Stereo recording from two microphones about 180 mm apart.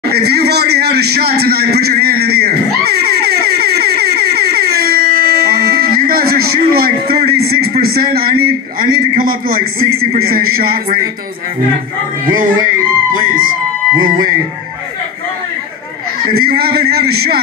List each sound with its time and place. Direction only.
0.1 s a sound: 65° right (ahead or behind)
6.7 s a man's voice: 60° right (ahead or behind)
12.3 s speech: 50° right (ahead or behind)
16.3 s a man's voice: 55° right (ahead or behind)